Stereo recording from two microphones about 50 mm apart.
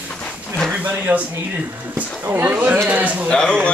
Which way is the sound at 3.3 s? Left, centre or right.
Centre.